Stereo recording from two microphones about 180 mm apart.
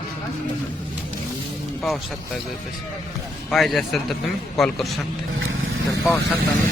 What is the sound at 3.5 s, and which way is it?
A man's voice, centre (ahead or behind).